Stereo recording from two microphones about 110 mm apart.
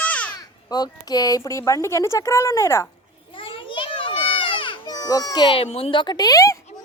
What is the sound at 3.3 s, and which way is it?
Children playing, 50° left (ahead or behind).